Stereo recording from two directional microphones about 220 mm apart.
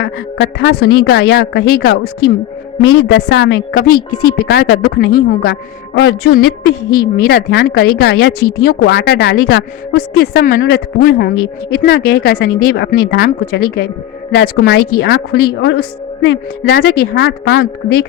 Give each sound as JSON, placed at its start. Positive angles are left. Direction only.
{"t": 0.3, "sound": "a woman's voice", "side_deg": 70}
{"t": 0.7, "sound": "a woman's voice", "side_deg": 50}
{"t": 3.2, "sound": "a woman's voice", "side_deg": 70}
{"t": 3.5, "sound": "a woman's voice", "side_deg": 45}